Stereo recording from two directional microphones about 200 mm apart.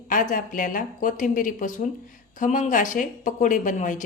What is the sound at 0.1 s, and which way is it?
A woman's voice, 40° left (ahead or behind).